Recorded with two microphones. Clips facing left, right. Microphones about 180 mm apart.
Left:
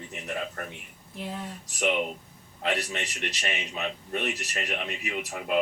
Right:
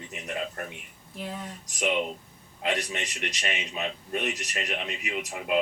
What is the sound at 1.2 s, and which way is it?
Speech, centre (ahead or behind).